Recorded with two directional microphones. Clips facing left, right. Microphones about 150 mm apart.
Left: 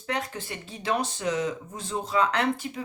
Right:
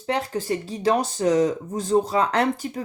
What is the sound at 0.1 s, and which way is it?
Speech, 35° right (ahead or behind).